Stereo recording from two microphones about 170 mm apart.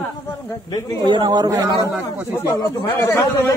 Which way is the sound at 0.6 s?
25° left (ahead or behind).